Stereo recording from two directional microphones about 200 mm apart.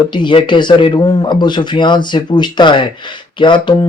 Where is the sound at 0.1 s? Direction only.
25° left (ahead or behind).